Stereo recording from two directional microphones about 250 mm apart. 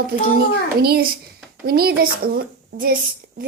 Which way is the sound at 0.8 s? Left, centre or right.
Right.